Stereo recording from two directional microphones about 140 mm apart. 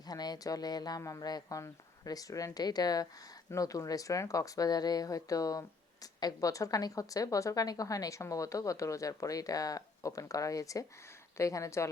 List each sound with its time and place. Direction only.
0.0 s speech: 30° left (ahead or behind)